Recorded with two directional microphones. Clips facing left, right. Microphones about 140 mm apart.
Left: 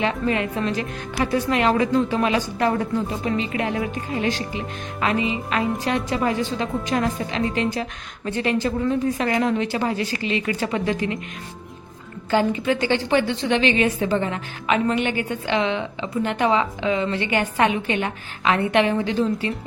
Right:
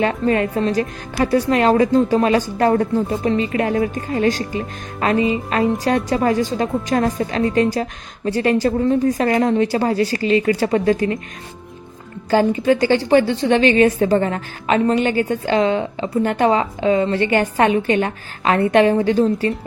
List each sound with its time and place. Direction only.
0.0 s speech: 45° right (ahead or behind)
12.3 s a woman's voice: 40° right (ahead or behind)